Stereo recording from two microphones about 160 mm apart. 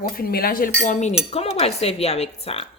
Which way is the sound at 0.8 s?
50° left (ahead or behind).